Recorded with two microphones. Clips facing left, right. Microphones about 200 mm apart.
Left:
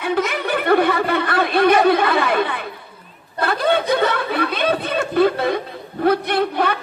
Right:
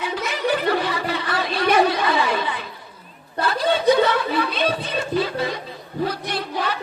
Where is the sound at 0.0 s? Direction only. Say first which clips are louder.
Left 4 dB; 55° left (ahead or behind).